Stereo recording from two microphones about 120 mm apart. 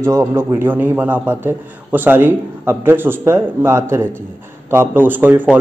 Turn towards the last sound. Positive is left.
turn(degrees=-15)  # may be behind; listen again after turning